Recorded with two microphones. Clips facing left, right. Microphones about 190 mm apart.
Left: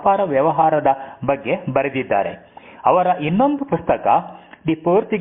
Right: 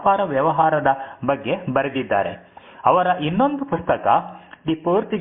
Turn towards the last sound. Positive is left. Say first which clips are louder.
# left 3 dB
turn(degrees=15)  # may be behind; listen again after turning